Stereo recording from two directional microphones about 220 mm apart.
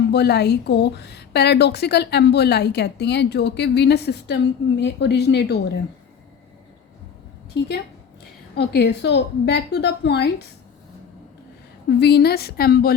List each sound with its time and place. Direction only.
0.1 s a woman's voice: 50° left (ahead or behind)
8.5 s a woman's voice: 50° left (ahead or behind)
11.9 s a woman's voice: 50° left (ahead or behind)